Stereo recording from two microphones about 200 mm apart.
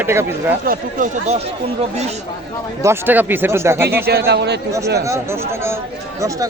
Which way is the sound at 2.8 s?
10° right (ahead or behind).